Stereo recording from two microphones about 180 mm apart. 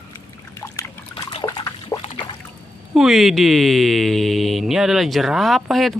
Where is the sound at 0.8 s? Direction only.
20° left (ahead or behind).